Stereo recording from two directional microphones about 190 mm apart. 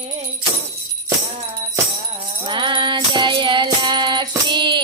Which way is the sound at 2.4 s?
25° right (ahead or behind).